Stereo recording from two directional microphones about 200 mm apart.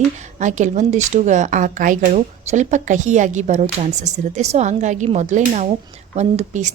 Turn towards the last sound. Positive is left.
turn(degrees=-35)  # may be behind; listen again after turning